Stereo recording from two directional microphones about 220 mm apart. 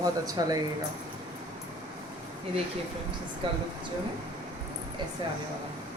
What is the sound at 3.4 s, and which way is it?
Speech, 25° right (ahead or behind).